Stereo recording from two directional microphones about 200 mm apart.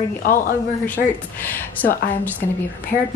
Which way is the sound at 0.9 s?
10° left (ahead or behind).